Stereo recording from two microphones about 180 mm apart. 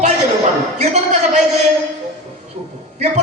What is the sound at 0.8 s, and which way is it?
Speech, 40° right (ahead or behind).